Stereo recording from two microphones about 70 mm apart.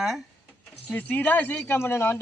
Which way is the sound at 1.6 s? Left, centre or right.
Left.